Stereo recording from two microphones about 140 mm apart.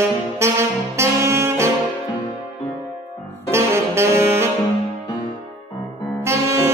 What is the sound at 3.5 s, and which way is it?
Saxophone, 20° right (ahead or behind).